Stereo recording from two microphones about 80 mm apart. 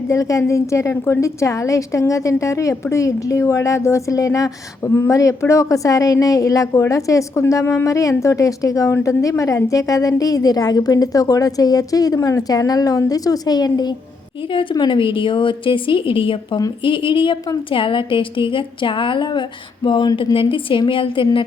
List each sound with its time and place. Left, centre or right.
0.1 s a woman's voice: left
4.9 s speech: left
5.1 s a woman's voice: left
14.5 s a woman's voice: left